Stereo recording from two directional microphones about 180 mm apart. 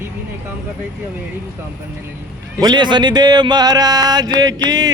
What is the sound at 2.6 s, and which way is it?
Speech, 25° right (ahead or behind).